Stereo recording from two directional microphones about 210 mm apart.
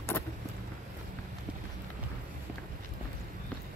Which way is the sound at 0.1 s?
10° left (ahead or behind).